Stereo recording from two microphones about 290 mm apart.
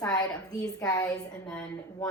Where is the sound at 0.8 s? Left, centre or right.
Centre.